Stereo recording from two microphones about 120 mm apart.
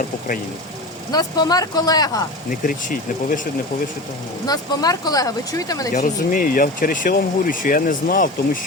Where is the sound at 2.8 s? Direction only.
90° left.